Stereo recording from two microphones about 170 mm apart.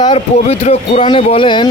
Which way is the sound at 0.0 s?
35° left (ahead or behind).